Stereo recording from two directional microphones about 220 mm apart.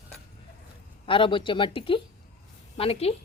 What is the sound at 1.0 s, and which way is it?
Speech, 25° left (ahead or behind).